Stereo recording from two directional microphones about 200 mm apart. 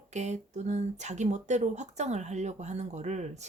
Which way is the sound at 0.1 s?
35° right (ahead or behind).